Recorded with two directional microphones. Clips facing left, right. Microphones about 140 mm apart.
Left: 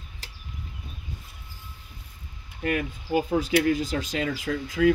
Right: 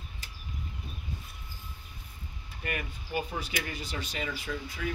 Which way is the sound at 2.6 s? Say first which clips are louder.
Left 9 dB; 85° left.